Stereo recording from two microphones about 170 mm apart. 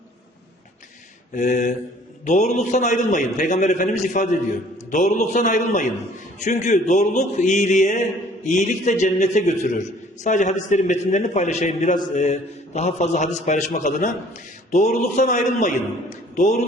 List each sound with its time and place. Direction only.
1.3 s a man's voice: 50° left (ahead or behind)